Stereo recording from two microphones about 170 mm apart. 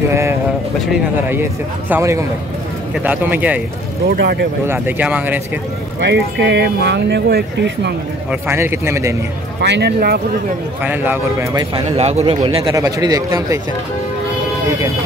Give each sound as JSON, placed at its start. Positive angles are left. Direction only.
{"t": 0.1, "sound": "a sound", "side_deg": -15}
{"t": 1.3, "sound": "speech", "side_deg": -15}
{"t": 4.1, "sound": "speech", "side_deg": -70}
{"t": 4.6, "sound": "speech", "side_deg": -10}
{"t": 5.9, "sound": "speech", "side_deg": -90}
{"t": 8.3, "sound": "speech", "side_deg": -15}
{"t": 9.6, "sound": "speech", "side_deg": -80}
{"t": 10.8, "sound": "speech", "side_deg": -10}
{"t": 11.5, "sound": "speech", "side_deg": -35}
{"t": 12.6, "sound": "a man's voice", "side_deg": -20}